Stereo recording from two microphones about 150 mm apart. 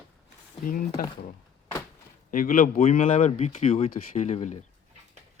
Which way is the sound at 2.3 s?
65° left (ahead or behind).